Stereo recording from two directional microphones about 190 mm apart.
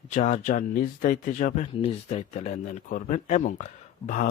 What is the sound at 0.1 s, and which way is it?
Speech, 40° left (ahead or behind).